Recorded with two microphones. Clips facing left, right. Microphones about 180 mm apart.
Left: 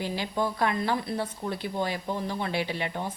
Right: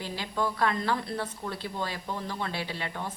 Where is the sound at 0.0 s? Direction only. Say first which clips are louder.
Left 3 dB; 15° left (ahead or behind).